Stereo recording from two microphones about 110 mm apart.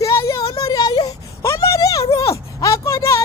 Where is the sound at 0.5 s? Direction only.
35° left (ahead or behind).